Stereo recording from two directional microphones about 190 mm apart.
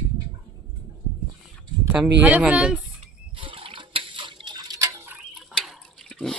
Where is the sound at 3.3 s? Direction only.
25° right (ahead or behind).